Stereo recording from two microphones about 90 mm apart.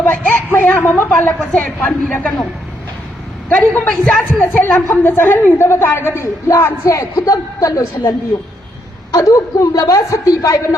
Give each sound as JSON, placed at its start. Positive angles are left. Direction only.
{"t": 0.0, "sound": "a woman's voice", "side_deg": 20}
{"t": 3.5, "sound": "a woman's voice", "side_deg": 10}
{"t": 9.1, "sound": "a woman's voice", "side_deg": 40}